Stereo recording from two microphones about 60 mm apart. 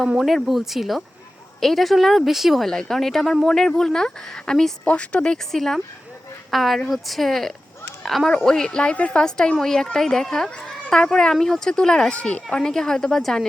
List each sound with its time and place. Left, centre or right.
0.2 s a woman's voice: centre
5.5 s a woman's voice: centre